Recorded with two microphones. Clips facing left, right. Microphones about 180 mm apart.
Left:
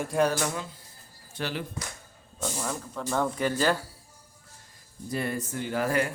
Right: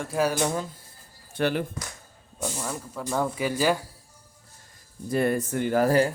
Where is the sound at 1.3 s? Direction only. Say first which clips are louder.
Right 8 dB; 55° right (ahead or behind).